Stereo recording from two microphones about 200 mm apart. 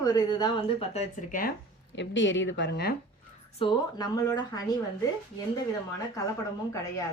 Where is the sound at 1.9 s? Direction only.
65° left (ahead or behind).